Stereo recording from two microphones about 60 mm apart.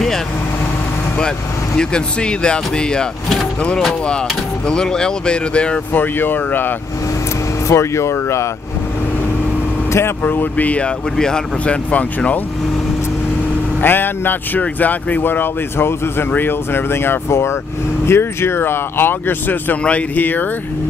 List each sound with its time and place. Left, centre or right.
1.8 s speech: centre
4.6 s speech: centre
5.9 s speech: left
7.6 s speech: left
10.2 s speech: left
11.1 s speech: centre
13.7 s speech: left
19.8 s speech: left